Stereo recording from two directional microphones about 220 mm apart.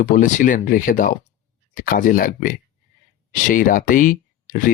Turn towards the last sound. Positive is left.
turn(degrees=35)  # may be behind; listen again after turning